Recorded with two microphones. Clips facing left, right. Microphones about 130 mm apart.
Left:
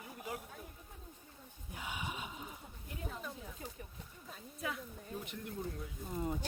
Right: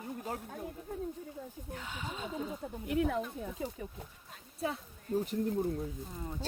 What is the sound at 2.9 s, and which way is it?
Speech, 80° right.